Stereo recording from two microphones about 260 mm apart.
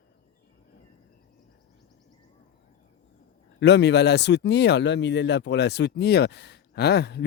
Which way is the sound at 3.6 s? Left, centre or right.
Left.